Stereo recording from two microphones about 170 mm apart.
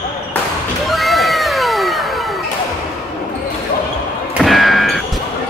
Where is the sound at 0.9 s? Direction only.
Centre (ahead or behind).